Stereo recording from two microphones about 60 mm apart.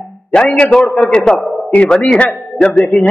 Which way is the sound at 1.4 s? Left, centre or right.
Left.